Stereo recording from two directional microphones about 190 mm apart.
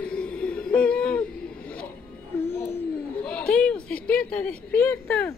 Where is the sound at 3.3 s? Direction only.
5° left (ahead or behind).